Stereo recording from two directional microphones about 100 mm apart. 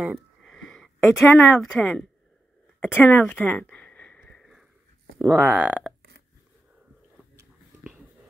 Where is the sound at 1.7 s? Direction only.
10° left (ahead or behind).